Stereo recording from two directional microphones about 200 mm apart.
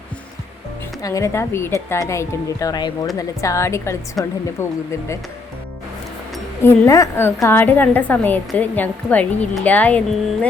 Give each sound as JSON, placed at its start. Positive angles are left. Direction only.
{"t": 1.0, "sound": "a woman's voice", "side_deg": 15}
{"t": 6.6, "sound": "a woman's voice", "side_deg": 15}